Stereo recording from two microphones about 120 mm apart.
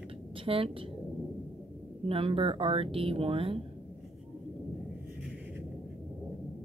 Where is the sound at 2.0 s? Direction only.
50° right (ahead or behind).